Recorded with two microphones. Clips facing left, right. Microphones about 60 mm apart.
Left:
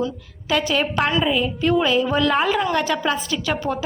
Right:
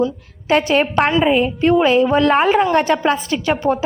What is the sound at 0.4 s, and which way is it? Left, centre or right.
A woman's voice, right.